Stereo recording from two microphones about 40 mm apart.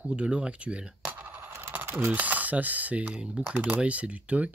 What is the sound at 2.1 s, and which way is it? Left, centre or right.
Speech, right.